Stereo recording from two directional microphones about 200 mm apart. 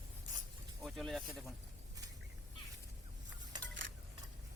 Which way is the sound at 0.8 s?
Centre (ahead or behind).